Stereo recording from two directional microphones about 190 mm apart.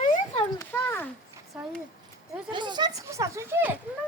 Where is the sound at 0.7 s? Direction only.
10° left (ahead or behind).